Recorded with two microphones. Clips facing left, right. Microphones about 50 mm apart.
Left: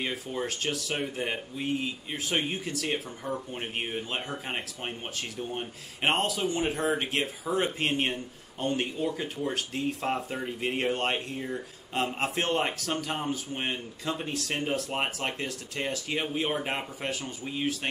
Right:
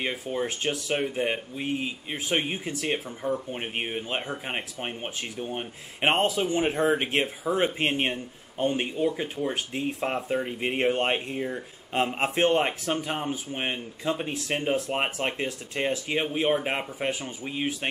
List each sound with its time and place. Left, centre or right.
0.0 s speech: centre